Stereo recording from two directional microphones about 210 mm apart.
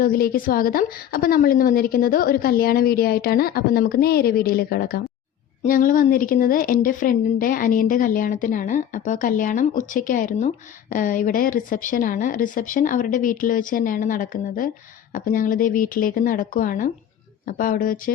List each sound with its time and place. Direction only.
0.0 s a woman's voice: 45° left (ahead or behind)